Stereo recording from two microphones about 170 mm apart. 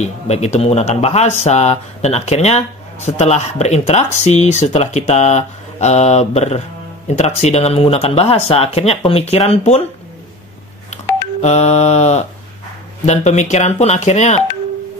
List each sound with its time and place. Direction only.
0.0 s speech: 40° left (ahead or behind)
11.4 s speech: 40° left (ahead or behind)